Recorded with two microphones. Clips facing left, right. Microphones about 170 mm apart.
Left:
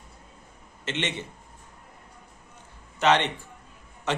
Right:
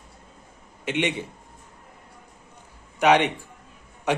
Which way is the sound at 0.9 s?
10° right (ahead or behind).